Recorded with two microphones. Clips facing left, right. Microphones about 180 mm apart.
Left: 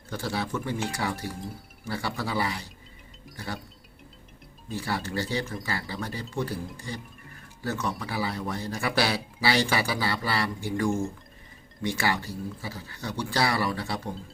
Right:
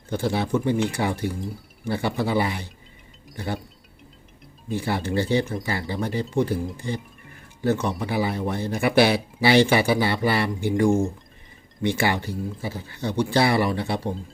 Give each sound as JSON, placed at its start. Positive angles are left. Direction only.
{"t": 0.1, "sound": "speech", "side_deg": -20}
{"t": 4.7, "sound": "speech", "side_deg": -20}